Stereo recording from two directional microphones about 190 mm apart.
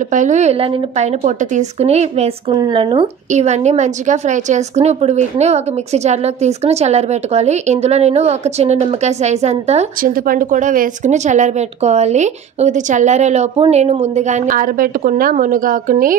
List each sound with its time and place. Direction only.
0.1 s a woman's voice: 40° right (ahead or behind)
3.3 s a woman's voice: 35° right (ahead or behind)
10.1 s a woman's voice: 50° right (ahead or behind)